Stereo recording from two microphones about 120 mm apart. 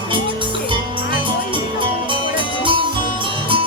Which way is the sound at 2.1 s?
45° right (ahead or behind).